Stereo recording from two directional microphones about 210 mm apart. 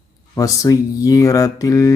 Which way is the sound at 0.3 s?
15° left (ahead or behind).